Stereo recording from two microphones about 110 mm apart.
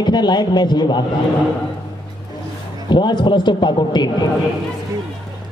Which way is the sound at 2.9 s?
45° left (ahead or behind).